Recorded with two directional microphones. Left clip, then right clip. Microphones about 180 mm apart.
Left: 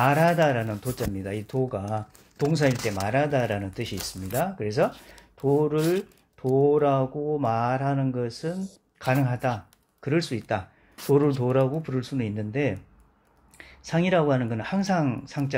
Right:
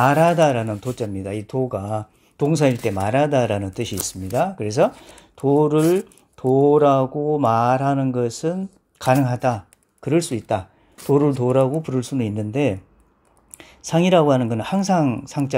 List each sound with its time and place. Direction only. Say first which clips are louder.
0.0 s speech: right 5 dB; 30° right (ahead or behind)
2.3 s speech: right 5 dB; 35° right (ahead or behind)